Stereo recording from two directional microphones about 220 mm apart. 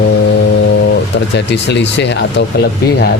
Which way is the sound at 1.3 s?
50° left (ahead or behind).